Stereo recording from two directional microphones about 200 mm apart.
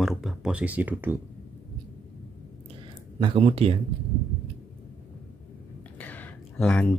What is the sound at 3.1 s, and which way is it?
Speech, 25° right (ahead or behind).